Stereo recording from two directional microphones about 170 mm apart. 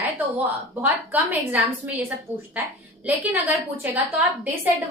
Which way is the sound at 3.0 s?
10° right (ahead or behind).